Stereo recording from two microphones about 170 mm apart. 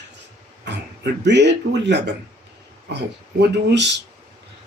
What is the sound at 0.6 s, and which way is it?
A man's voice, 90° right.